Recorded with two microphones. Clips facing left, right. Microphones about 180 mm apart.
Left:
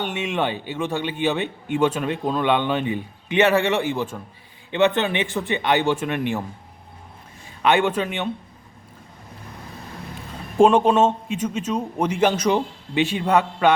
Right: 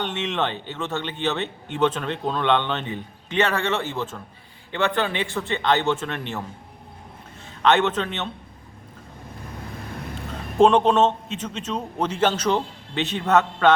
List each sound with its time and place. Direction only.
0.0 s a man's voice: 10° left (ahead or behind)
7.6 s a man's voice: 10° left (ahead or behind)
10.6 s a man's voice: 5° left (ahead or behind)